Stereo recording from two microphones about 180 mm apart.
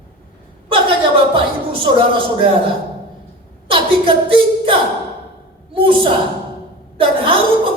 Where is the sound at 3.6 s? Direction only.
30° right (ahead or behind).